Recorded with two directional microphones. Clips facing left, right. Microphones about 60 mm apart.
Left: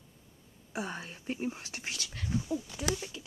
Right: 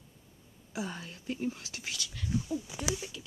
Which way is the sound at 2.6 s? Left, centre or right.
Centre.